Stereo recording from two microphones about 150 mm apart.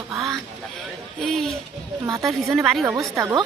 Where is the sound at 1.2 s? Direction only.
Centre (ahead or behind).